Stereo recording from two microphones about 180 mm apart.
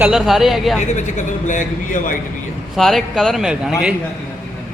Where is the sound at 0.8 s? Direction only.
45° left (ahead or behind).